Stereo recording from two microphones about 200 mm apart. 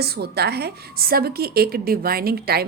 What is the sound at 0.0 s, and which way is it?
Speech, 50° right (ahead or behind).